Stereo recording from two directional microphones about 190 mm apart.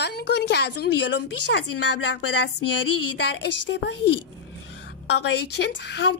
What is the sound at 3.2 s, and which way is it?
A woman's voice, 65° left (ahead or behind).